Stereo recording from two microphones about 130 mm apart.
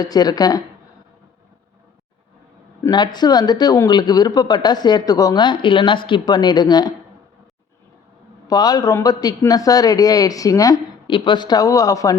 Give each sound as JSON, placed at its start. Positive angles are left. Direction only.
{"t": 0.0, "sound": "speech", "side_deg": 30}
{"t": 2.9, "sound": "speech", "side_deg": 35}
{"t": 8.4, "sound": "a man's voice", "side_deg": 30}
{"t": 11.0, "sound": "speech", "side_deg": 40}